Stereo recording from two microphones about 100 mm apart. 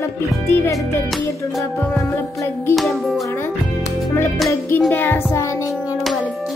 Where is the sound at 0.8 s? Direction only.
Centre (ahead or behind).